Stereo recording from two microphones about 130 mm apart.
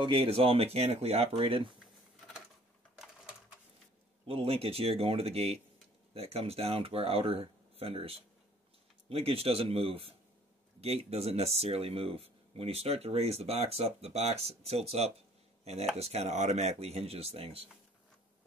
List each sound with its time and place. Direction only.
0.0 s speech: 45° right (ahead or behind)
4.3 s speech: 50° right (ahead or behind)